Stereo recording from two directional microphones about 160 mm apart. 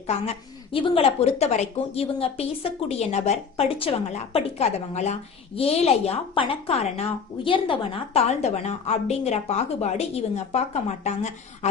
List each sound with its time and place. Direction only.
0.1 s a woman's voice: 40° left (ahead or behind)